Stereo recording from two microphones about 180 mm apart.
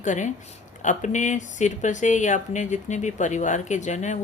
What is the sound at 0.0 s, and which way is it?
Speech, 45° left (ahead or behind).